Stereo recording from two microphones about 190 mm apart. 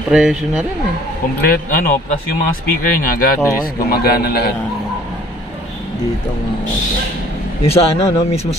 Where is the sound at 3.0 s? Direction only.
50° left (ahead or behind).